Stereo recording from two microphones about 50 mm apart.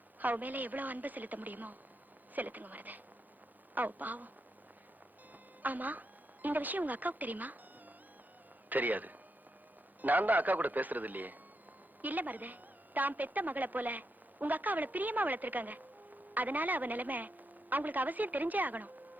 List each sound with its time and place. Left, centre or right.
0.2 s a woman's voice: right
5.3 s a sound: right
8.7 s a woman's voice: right